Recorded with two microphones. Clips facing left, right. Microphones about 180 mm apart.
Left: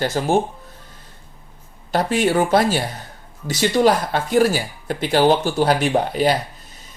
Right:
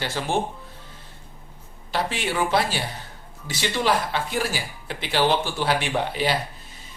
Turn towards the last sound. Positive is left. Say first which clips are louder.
# left 7 dB
turn(degrees=45)  # may be behind; listen again after turning